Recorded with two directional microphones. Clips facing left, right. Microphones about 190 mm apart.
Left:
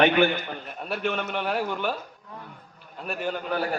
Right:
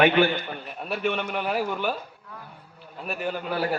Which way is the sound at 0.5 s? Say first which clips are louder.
Even; 5° right (ahead or behind).